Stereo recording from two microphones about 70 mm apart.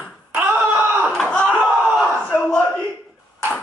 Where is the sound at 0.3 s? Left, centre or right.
Right.